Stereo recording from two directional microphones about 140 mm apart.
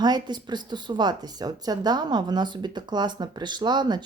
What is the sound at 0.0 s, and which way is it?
A woman's voice, 30° right (ahead or behind).